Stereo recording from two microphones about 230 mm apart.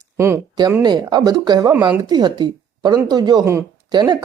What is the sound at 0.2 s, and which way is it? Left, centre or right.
Speech, centre.